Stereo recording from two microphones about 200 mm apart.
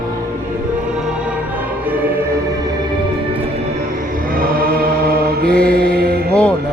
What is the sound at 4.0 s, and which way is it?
Mantra, 45° right (ahead or behind).